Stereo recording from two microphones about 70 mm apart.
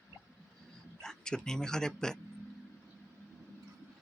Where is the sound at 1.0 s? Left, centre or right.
Centre.